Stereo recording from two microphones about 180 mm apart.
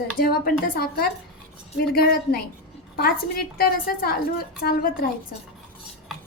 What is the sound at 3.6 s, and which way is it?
A woman's voice, 55° left (ahead or behind).